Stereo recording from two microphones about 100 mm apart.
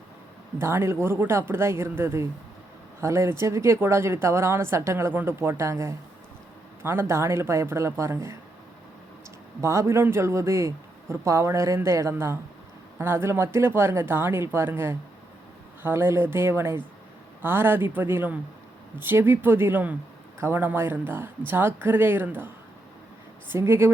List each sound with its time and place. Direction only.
0.6 s a woman's voice: 25° right (ahead or behind)
9.6 s a woman's voice: 30° right (ahead or behind)
23.5 s a woman's voice: 20° right (ahead or behind)